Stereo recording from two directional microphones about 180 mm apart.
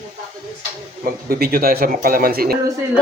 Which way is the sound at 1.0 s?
55° right (ahead or behind).